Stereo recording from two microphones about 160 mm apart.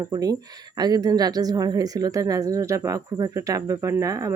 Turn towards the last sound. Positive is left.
turn(degrees=-20)  # may be behind; listen again after turning